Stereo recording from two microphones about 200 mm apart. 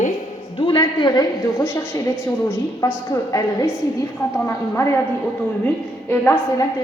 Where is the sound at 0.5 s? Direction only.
25° left (ahead or behind).